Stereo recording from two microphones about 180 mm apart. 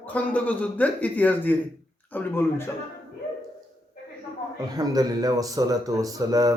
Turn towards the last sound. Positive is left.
turn(degrees=-20)  # may be behind; listen again after turning